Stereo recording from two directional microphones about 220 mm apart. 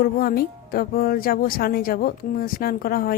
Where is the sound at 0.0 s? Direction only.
40° left (ahead or behind).